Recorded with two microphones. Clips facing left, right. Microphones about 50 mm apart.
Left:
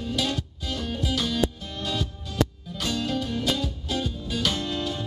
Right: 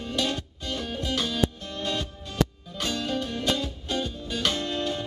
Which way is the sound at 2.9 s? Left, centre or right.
Centre.